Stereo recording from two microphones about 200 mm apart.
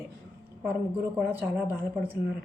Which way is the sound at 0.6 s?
5° right (ahead or behind).